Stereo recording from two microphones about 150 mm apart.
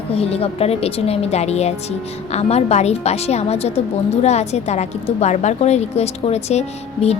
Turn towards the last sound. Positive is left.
turn(degrees=45)  # may be behind; listen again after turning